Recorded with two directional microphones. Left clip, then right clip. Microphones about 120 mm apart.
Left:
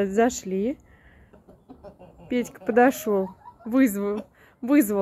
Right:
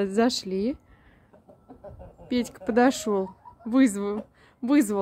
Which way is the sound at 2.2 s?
15° right (ahead or behind).